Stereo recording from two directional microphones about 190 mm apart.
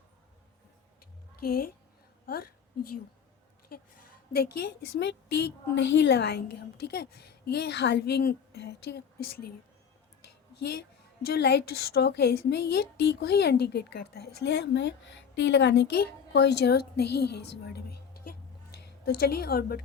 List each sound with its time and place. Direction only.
1.4 s a woman's voice: 50° left (ahead or behind)
4.3 s a woman's voice: 60° left (ahead or behind)
10.6 s a woman's voice: 60° left (ahead or behind)